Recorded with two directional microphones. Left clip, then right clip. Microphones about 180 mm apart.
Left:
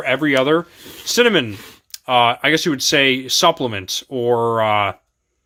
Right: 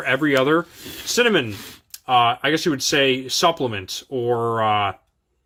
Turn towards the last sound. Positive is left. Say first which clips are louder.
# left 3 dB
turn(degrees=20)  # may be behind; listen again after turning